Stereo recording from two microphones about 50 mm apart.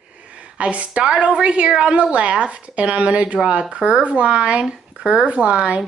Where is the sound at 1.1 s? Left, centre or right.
Right.